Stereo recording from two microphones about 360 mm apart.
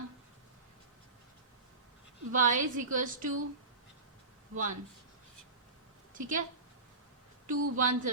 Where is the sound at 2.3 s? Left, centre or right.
Right.